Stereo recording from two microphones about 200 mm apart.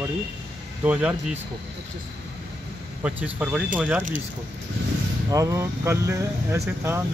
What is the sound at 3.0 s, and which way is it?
Speech, 5° right (ahead or behind).